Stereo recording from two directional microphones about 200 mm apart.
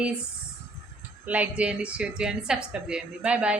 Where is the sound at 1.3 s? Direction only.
5° right (ahead or behind).